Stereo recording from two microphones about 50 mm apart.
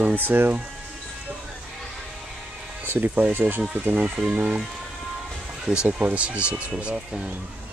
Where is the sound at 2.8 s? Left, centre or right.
Right.